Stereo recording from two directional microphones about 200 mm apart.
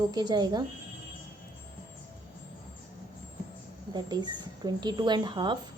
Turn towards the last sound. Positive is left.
turn(degrees=-20)  # may be behind; listen again after turning